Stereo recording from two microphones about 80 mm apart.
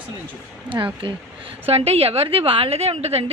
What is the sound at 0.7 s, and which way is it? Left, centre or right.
Speech, right.